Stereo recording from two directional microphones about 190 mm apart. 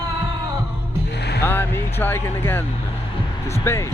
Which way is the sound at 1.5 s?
10° left (ahead or behind).